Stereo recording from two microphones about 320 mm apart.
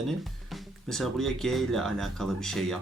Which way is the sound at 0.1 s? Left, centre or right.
Centre.